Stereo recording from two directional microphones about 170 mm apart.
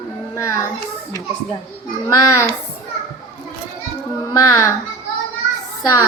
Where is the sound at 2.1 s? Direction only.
20° left (ahead or behind).